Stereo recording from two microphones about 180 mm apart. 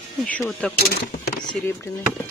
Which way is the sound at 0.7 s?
60° left (ahead or behind).